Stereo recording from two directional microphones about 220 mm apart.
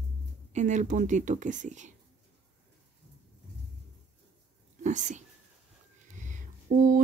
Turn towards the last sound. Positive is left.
turn(degrees=-35)  # may be behind; listen again after turning